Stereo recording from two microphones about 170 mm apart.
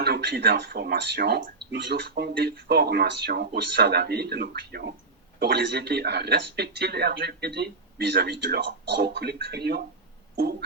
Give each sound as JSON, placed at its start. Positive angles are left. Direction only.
{"t": 0.0, "sound": "speech", "side_deg": -75}